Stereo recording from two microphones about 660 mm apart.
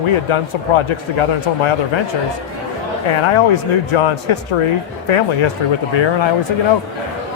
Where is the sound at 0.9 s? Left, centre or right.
Left.